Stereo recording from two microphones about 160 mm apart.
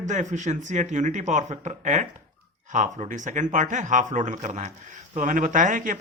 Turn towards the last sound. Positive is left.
turn(degrees=-55)  # may be behind; listen again after turning